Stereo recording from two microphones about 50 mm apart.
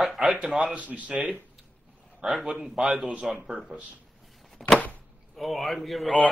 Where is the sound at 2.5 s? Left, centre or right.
Right.